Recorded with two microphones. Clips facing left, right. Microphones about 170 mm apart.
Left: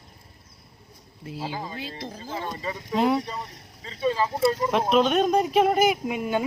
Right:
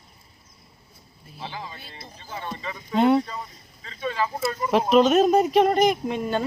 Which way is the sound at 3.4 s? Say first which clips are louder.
Left 1 dB; 75° left (ahead or behind).